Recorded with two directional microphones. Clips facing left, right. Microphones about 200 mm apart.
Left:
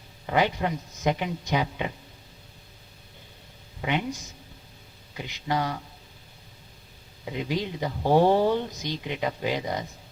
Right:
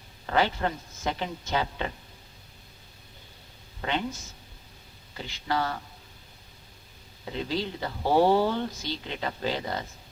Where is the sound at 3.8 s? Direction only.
15° left (ahead or behind).